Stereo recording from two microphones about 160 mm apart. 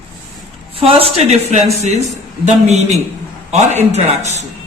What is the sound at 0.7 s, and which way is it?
Speech, 35° right (ahead or behind).